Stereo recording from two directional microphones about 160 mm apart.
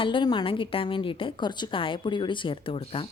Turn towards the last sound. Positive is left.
turn(degrees=35)  # may be behind; listen again after turning